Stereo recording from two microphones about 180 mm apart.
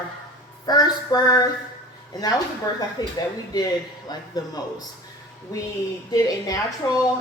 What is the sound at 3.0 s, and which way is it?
Speech, 25° left (ahead or behind).